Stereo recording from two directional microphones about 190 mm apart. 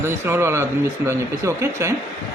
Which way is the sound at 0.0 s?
10° right (ahead or behind).